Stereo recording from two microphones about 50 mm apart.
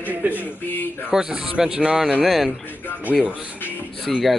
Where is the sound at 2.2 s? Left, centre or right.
Centre.